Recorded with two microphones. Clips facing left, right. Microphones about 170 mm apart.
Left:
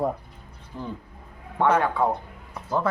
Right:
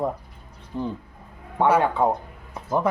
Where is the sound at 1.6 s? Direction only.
10° right (ahead or behind).